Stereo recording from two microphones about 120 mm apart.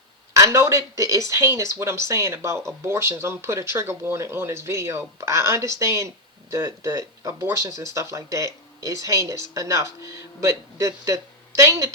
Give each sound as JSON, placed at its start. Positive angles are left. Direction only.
{"t": 0.3, "sound": "speech", "side_deg": -25}